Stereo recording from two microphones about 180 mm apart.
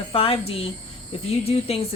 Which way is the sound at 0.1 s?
30° left (ahead or behind).